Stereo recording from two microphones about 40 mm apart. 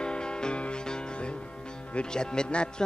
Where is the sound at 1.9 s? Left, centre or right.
Left.